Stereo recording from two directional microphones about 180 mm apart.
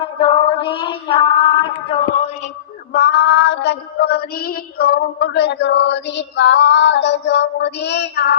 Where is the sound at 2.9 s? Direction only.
65° left (ahead or behind).